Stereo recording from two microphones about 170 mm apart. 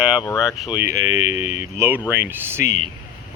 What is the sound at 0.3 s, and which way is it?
Speech, centre (ahead or behind).